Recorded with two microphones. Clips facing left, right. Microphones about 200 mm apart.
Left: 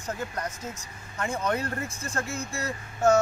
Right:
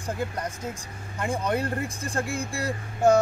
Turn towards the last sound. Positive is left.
turn(degrees=-15)  # may be behind; listen again after turning